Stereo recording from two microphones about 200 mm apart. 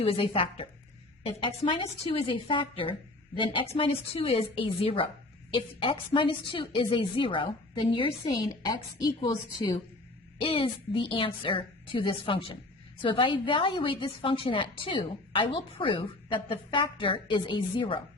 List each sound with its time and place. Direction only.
0.0 s a woman's voice: 25° left (ahead or behind)